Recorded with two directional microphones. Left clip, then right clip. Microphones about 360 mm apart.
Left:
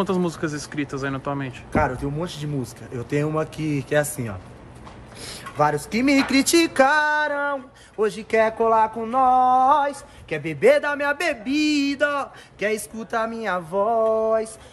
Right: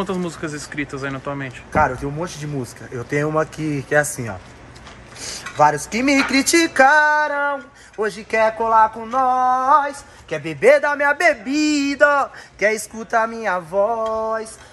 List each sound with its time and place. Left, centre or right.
0.0 s speech: centre
5.6 s speech: centre
8.3 s a sound: centre
10.5 s speech: centre